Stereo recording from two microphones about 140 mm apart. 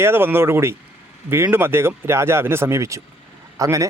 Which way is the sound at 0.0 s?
15° right (ahead or behind).